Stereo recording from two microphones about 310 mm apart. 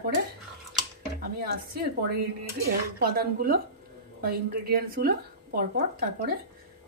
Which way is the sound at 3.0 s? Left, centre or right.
Right.